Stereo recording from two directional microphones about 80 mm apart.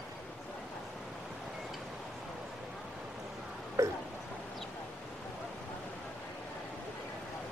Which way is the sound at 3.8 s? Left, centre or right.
Right.